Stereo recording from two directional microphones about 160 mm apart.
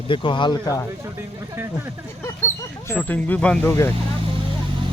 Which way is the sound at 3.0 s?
10° left (ahead or behind).